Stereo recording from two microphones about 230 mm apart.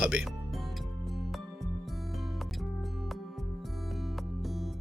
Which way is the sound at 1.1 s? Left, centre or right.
Centre.